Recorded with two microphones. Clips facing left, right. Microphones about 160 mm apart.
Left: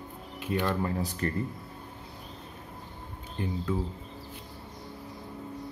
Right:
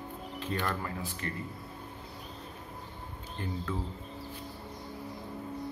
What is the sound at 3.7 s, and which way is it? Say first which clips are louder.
Speech: left 6 dB; 10° left (ahead or behind).